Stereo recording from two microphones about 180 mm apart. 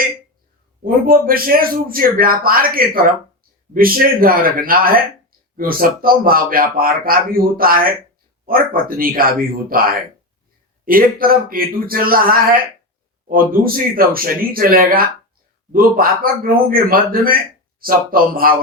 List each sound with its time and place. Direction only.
0.9 s a man's voice: 55° right (ahead or behind)